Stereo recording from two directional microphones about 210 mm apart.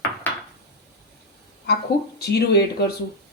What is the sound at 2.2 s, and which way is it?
Speech, 50° left (ahead or behind).